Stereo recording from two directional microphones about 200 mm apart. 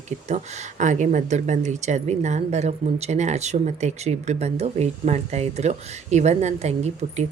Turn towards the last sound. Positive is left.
turn(degrees=-35)  # may be behind; listen again after turning